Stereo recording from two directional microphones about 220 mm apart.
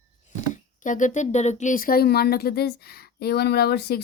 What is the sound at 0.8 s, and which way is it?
Speech, 35° left (ahead or behind).